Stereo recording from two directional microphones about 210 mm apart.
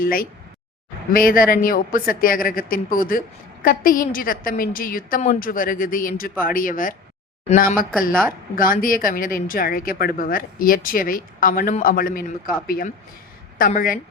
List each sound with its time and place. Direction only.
0.0 s speech: 45° left (ahead or behind)